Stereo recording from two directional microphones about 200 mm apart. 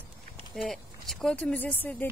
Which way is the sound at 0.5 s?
Centre (ahead or behind).